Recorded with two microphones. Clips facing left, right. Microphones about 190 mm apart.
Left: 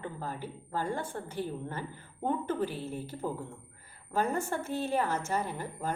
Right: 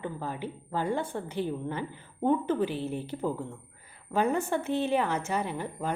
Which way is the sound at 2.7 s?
10° left (ahead or behind).